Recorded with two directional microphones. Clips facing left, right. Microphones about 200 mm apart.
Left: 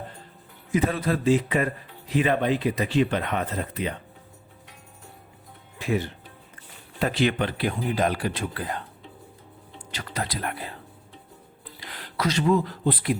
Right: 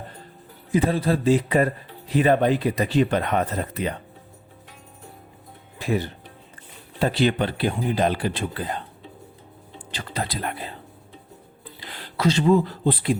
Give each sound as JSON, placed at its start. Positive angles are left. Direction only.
{"t": 0.7, "sound": "a man's voice", "side_deg": -30}
{"t": 5.8, "sound": "speech", "side_deg": -35}
{"t": 9.7, "sound": "a sound", "side_deg": -30}
{"t": 10.2, "sound": "speech", "side_deg": -30}
{"t": 11.8, "sound": "speech", "side_deg": -30}